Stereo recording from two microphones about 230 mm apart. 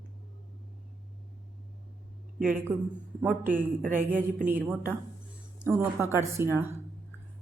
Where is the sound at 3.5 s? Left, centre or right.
Right.